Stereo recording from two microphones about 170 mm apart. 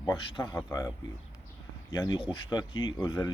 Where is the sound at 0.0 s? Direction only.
25° left (ahead or behind).